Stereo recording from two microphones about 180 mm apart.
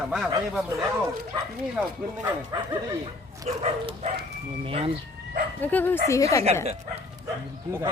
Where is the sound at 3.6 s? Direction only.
35° right (ahead or behind).